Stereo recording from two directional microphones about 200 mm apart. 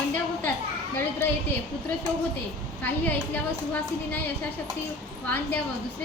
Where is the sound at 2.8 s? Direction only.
10° left (ahead or behind).